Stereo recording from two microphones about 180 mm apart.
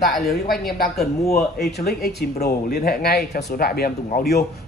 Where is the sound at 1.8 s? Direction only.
60° left (ahead or behind).